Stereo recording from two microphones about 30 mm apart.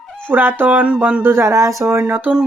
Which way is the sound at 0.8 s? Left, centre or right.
Right.